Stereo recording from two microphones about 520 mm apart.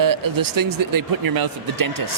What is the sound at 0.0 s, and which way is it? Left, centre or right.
Speech, right.